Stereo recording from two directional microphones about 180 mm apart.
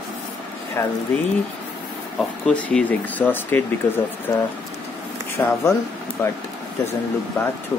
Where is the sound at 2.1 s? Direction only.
5° left (ahead or behind).